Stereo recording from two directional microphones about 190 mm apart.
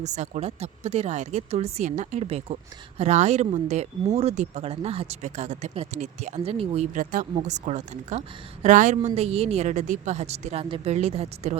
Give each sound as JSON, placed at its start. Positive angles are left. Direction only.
{"t": 0.0, "sound": "speech", "side_deg": -35}
{"t": 6.9, "sound": "speech", "side_deg": -45}